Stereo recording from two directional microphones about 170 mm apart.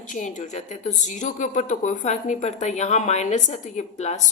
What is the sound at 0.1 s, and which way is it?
A woman's voice, 45° left (ahead or behind).